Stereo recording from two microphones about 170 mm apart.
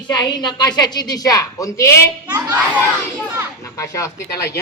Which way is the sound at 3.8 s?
15° left (ahead or behind).